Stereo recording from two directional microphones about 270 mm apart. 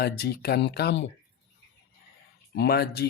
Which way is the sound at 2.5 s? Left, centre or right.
Left.